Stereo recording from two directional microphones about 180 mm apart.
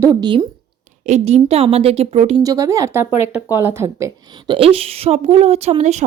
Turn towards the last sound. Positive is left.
turn(degrees=-40)  # may be behind; listen again after turning